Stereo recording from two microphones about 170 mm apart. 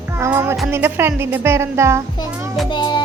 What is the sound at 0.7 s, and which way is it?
A woman's voice, 15° right (ahead or behind).